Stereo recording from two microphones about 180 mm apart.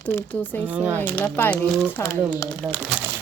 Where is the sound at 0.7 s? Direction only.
10° right (ahead or behind).